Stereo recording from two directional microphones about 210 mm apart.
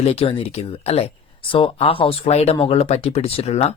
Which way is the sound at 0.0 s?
25° left (ahead or behind).